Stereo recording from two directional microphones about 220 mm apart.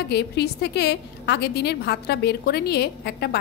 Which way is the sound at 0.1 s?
50° left (ahead or behind).